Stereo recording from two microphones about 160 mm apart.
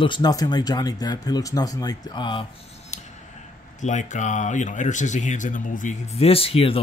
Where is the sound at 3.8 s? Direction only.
50° left (ahead or behind).